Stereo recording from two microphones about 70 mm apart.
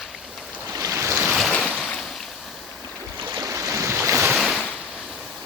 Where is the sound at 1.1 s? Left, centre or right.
Right.